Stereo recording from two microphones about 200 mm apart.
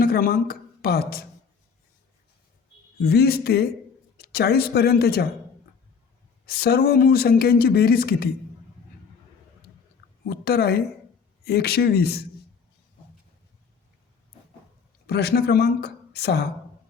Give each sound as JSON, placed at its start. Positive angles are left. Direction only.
{"t": 0.0, "sound": "a woman's voice", "side_deg": 50}
{"t": 3.0, "sound": "speech", "side_deg": 50}
{"t": 6.4, "sound": "speech", "side_deg": 50}
{"t": 10.2, "sound": "a woman's voice", "side_deg": 50}
{"t": 15.0, "sound": "a woman's voice", "side_deg": 55}